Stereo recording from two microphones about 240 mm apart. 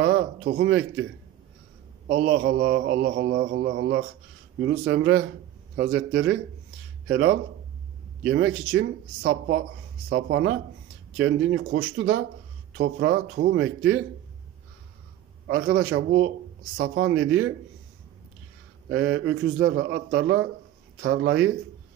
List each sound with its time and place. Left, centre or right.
0.0 s a man's voice: right
2.0 s speech: right
4.6 s a man's voice: right
15.4 s a man's voice: right
18.9 s a man's voice: right